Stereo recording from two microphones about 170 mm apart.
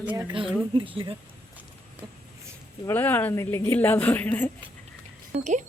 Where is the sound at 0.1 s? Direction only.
25° right (ahead or behind).